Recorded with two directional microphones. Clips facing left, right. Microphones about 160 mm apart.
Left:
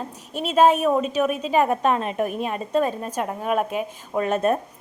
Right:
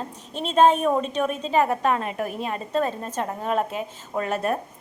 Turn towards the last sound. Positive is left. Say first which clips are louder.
# left 4 dB
turn(degrees=20)  # may be behind; listen again after turning